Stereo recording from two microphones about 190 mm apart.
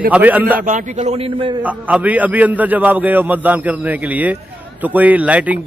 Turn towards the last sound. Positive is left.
turn(degrees=-5)  # may be behind; listen again after turning